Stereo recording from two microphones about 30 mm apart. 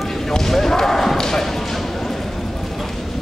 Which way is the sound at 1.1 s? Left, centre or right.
Centre.